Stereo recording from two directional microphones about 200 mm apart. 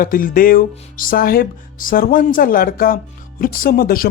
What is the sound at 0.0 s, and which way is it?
Speech, 45° left (ahead or behind).